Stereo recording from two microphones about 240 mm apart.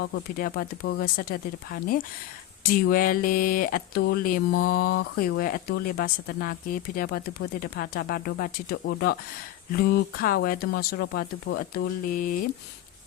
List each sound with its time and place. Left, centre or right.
0.0 s speech: left